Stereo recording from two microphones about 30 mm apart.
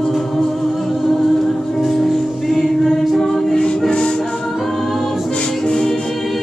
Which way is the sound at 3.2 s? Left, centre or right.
Centre.